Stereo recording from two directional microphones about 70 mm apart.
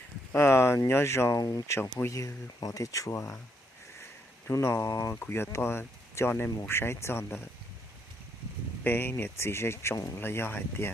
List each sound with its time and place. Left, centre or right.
0.3 s speech: left
1.4 s speech: left
1.6 s speech: left
2.0 s speech: left
4.5 s speech: left
4.9 s speech: left
5.1 s speech: left
8.8 s speech: left